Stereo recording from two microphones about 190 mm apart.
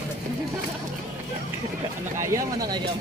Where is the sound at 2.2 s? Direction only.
15° right (ahead or behind).